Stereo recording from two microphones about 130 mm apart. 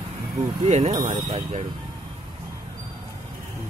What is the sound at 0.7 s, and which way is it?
Speech, 60° right (ahead or behind).